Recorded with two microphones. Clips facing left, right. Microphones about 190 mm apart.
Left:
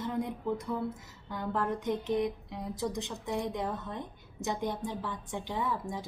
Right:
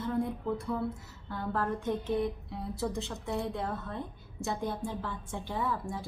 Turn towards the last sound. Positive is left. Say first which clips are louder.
# even
turn(degrees=15)  # may be behind; listen again after turning